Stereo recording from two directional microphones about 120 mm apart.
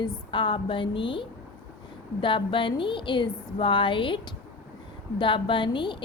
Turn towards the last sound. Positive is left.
turn(degrees=40)  # may be behind; listen again after turning